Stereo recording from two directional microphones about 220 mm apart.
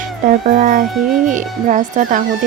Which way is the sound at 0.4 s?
40° right (ahead or behind).